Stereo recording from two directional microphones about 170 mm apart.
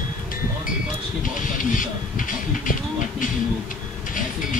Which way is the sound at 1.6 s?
50° left (ahead or behind).